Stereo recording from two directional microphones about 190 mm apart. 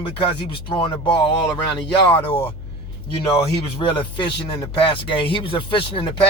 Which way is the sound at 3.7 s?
25° left (ahead or behind).